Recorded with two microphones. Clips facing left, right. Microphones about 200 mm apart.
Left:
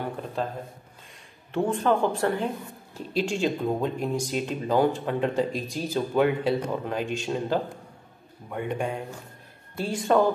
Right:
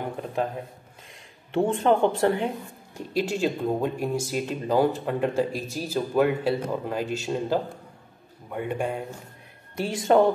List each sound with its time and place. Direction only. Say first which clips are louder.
0.0 s a sound: right 2 dB; 15° right (ahead or behind)
1.5 s speech: right 2 dB; 25° right (ahead or behind)
3.1 s speech: even; 10° right (ahead or behind)
10.0 s speech: right 2 dB; 25° right (ahead or behind)